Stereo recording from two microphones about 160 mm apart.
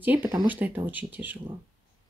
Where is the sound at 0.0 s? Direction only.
10° right (ahead or behind).